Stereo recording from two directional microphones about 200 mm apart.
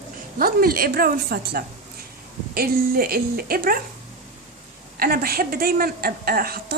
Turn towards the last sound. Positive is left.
turn(degrees=-50)  # may be behind; listen again after turning